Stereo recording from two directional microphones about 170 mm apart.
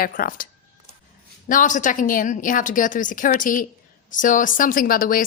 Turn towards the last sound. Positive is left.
turn(degrees=55)  # may be behind; listen again after turning